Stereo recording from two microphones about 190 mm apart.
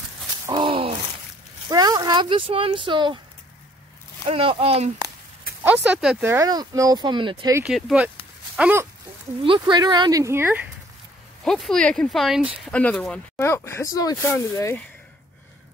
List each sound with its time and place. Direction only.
0.5 s a sound: 25° right (ahead or behind)
1.7 s speech: 20° right (ahead or behind)
4.3 s speech: 30° right (ahead or behind)
5.6 s speech: 10° right (ahead or behind)
6.2 s speech: 15° right (ahead or behind)
7.5 s speech: 5° right (ahead or behind)
8.5 s a sound: 5° right (ahead or behind)
9.4 s speech: 25° right (ahead or behind)
11.4 s speech: centre (ahead or behind)